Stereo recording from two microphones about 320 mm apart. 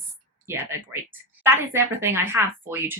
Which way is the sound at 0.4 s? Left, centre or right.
Centre.